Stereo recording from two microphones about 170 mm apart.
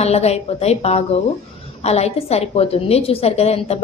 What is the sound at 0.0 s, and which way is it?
A woman's voice, 40° left (ahead or behind).